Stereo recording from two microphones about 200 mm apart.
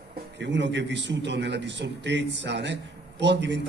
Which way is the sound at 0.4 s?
60° right (ahead or behind).